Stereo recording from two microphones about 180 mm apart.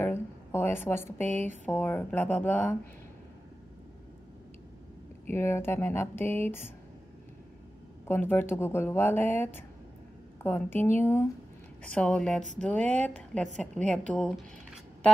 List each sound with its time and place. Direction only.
0.0 s a sound: 15° left (ahead or behind)
1.3 s speech: 40° right (ahead or behind)
1.7 s speech: 10° left (ahead or behind)
5.3 s speech: 15° left (ahead or behind)
8.1 s a woman's voice: 10° left (ahead or behind)